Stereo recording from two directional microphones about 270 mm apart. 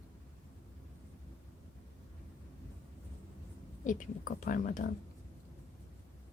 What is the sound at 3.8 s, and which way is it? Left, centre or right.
A woman's voice, left.